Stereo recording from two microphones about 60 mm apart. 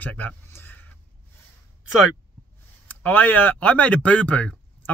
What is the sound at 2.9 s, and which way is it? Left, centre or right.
Speech, left.